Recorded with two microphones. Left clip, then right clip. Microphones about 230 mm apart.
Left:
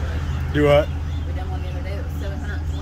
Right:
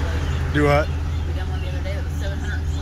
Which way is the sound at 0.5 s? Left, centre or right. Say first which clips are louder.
Left 3 dB; centre.